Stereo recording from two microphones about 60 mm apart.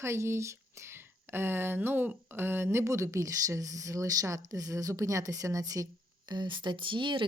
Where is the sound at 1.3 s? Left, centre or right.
Right.